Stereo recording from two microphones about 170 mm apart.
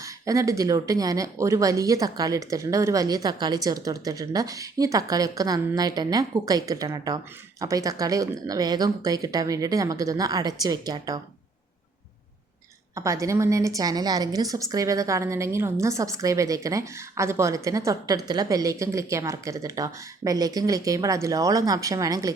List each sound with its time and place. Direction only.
0.0 s a woman's voice: 20° right (ahead or behind)
12.9 s a woman's voice: 20° right (ahead or behind)